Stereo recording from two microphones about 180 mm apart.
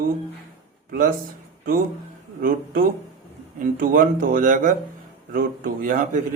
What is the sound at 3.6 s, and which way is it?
Speech, 50° right (ahead or behind).